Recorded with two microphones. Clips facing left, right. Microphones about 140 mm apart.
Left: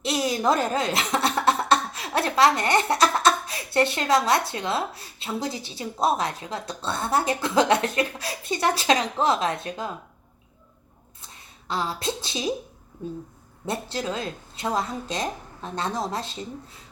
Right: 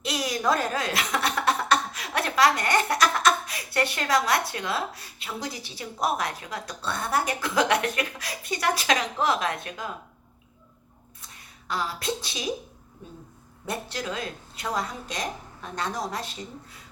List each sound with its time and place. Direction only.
0.0 s speech: 25° left (ahead or behind)
11.2 s a sound: 25° left (ahead or behind)
13.7 s speech: 25° left (ahead or behind)